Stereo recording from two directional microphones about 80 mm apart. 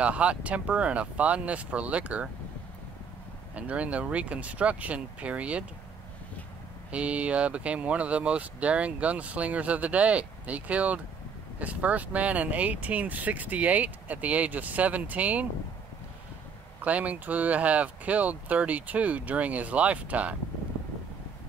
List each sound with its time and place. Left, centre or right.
0.0 s speech: centre
3.5 s speech: centre
6.9 s speech: centre
16.8 s speech: centre